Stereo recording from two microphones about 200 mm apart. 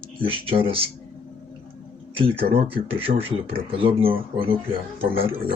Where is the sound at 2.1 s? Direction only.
25° right (ahead or behind).